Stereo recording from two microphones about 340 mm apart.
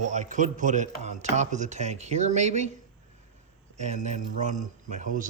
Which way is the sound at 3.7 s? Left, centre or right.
Centre.